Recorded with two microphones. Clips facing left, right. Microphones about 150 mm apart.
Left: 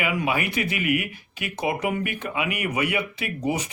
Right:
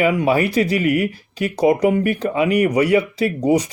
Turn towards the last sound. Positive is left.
turn(degrees=-35)  # may be behind; listen again after turning